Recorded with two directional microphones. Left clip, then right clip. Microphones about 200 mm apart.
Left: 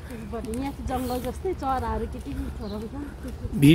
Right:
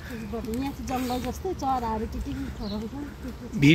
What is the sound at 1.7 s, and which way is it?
Speech, 35° right (ahead or behind).